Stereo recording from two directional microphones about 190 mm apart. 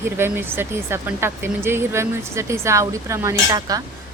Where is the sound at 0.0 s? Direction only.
10° right (ahead or behind).